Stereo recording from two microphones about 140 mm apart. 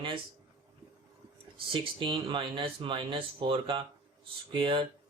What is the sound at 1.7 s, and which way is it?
Speech, 35° right (ahead or behind).